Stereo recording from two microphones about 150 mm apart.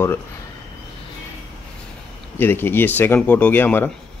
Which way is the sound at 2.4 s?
15° left (ahead or behind).